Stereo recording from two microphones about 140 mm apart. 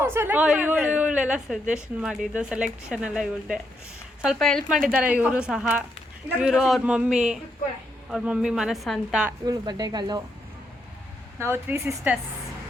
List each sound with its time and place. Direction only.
0.0 s a woman's voice: 15° right (ahead or behind)
9.4 s speech: 25° right (ahead or behind)
11.3 s a woman's voice: 20° right (ahead or behind)